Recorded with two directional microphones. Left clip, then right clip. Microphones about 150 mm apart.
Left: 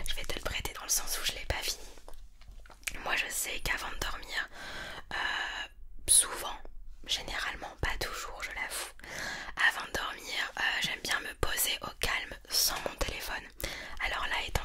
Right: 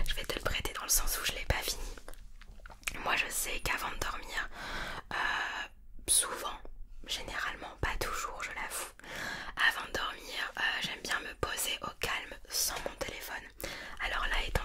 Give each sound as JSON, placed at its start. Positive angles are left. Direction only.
{"t": 0.0, "sound": "whispering", "side_deg": 0}
{"t": 2.8, "sound": "whispering", "side_deg": 0}
{"t": 4.6, "sound": "whispering", "side_deg": -5}
{"t": 7.8, "sound": "whispering", "side_deg": 5}
{"t": 12.4, "sound": "whispering", "side_deg": 55}
{"t": 13.6, "sound": "whispering", "side_deg": 35}